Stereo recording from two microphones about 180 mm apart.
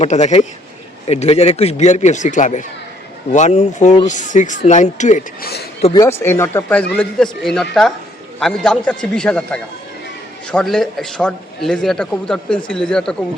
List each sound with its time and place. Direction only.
0.0 s a man's voice: 40° left (ahead or behind)
5.4 s speech: 60° left (ahead or behind)
5.8 s speech: 25° left (ahead or behind)
6.1 s a man's voice: 15° left (ahead or behind)